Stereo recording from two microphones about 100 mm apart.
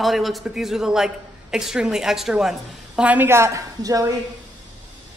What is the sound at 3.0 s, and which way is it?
A woman's voice, 15° right (ahead or behind).